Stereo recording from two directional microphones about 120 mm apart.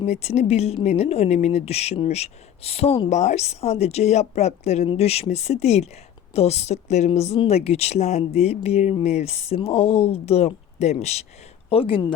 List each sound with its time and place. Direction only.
0.0 s speech: 60° left (ahead or behind)
3.1 s speech: 75° left (ahead or behind)
11.7 s speech: 50° left (ahead or behind)